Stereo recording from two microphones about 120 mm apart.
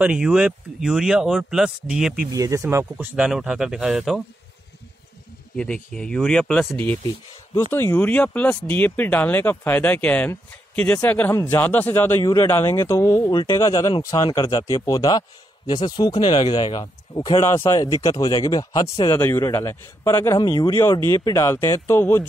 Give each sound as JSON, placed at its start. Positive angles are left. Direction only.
{"t": 0.0, "sound": "speech", "side_deg": -5}
{"t": 2.3, "sound": "speech", "side_deg": -25}
{"t": 3.2, "sound": "speech", "side_deg": -5}
{"t": 5.6, "sound": "speech", "side_deg": 5}
{"t": 7.7, "sound": "a man's voice", "side_deg": 15}